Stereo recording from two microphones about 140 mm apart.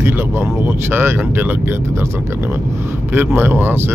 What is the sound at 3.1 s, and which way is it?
Speech, 15° right (ahead or behind).